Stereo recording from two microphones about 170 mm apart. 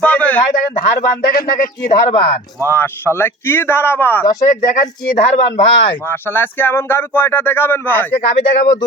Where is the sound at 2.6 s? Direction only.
10° left (ahead or behind).